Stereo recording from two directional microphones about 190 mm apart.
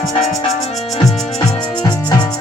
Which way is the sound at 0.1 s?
35° left (ahead or behind).